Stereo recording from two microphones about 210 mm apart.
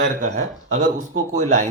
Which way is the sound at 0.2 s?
35° right (ahead or behind).